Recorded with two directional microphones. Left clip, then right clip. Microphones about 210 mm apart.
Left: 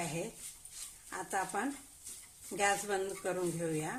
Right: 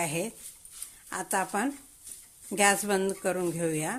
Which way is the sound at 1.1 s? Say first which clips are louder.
Right 6 dB; 45° right (ahead or behind).